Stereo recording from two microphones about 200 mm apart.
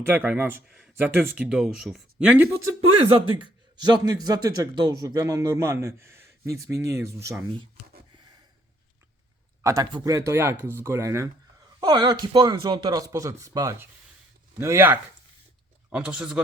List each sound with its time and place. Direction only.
0.2 s a man's voice: 5° right (ahead or behind)
3.0 s a man's voice: 25° right (ahead or behind)
9.6 s a man's voice: 15° right (ahead or behind)